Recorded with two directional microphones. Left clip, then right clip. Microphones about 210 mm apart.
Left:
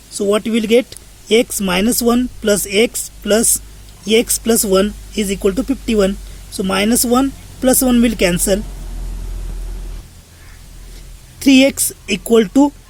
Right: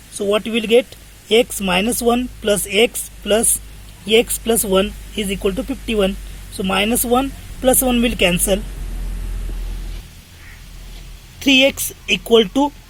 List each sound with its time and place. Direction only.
0.2 s speech: 40° left (ahead or behind)
11.3 s speech: 40° left (ahead or behind)